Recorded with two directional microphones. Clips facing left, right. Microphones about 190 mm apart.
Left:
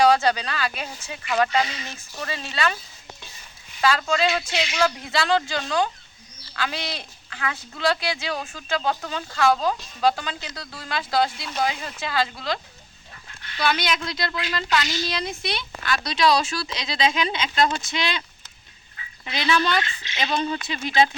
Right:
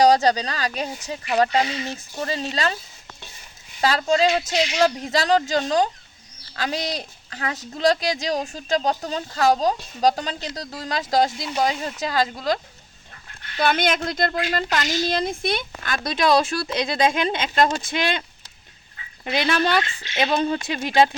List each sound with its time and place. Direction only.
0.0 s speech: 40° right (ahead or behind)
3.8 s speech: 35° right (ahead or behind)
13.6 s a woman's voice: 50° right (ahead or behind)
19.2 s a woman's voice: 55° right (ahead or behind)